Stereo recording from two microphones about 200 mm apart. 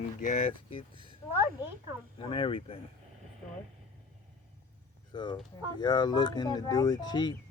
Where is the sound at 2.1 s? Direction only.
25° left (ahead or behind).